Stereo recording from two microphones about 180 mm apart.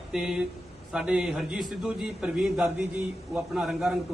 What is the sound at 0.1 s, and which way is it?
A man's voice, 5° right (ahead or behind).